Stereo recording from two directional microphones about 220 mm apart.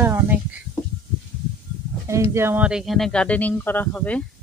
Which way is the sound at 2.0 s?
15° right (ahead or behind).